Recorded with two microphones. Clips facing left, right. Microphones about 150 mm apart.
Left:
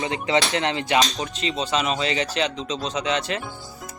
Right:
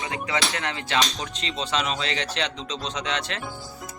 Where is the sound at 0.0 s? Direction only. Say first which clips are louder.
Left 5 dB; 20° left (ahead or behind).